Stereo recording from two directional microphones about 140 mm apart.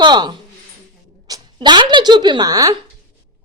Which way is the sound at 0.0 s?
30° right (ahead or behind).